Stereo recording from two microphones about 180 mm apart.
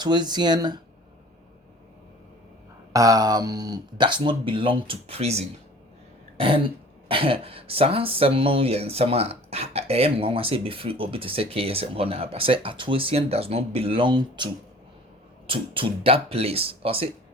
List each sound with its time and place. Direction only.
0.0 s speech: 25° right (ahead or behind)
2.9 s speech: 20° right (ahead or behind); by 5.5 s 35° right (ahead or behind)
6.3 s throat clearing: 30° right (ahead or behind)
7.1 s speech: 30° right (ahead or behind)